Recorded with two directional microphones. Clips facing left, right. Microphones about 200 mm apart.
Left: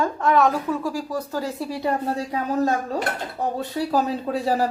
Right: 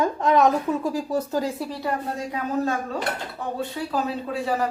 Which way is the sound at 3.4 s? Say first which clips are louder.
Left 4 dB; 40° left (ahead or behind).